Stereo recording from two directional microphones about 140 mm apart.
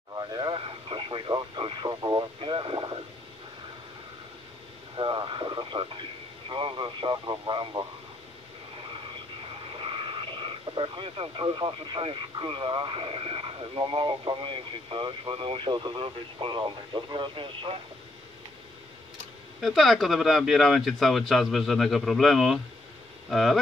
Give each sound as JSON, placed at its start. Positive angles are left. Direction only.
{"t": 0.1, "sound": "radio", "side_deg": -30}
{"t": 4.9, "sound": "radio", "side_deg": -35}
{"t": 9.7, "sound": "speech", "side_deg": -40}
{"t": 19.6, "sound": "speech", "side_deg": 0}